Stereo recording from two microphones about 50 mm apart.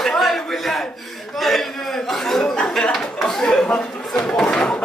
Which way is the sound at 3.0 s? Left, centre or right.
Centre.